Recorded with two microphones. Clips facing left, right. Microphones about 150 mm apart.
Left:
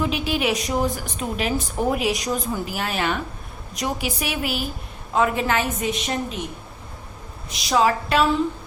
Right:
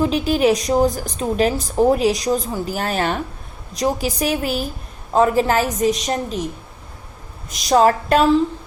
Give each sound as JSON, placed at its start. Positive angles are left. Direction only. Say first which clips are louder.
{"t": 0.0, "sound": "a woman's voice", "louder": "right 6 dB", "side_deg": -40}
{"t": 7.5, "sound": "a woman's voice", "louder": "right 5 dB", "side_deg": -45}